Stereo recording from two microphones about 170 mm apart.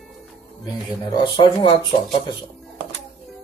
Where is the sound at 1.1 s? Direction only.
30° left (ahead or behind).